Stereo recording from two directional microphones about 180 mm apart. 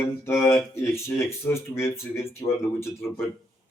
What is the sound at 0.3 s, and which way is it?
Speech, 15° left (ahead or behind).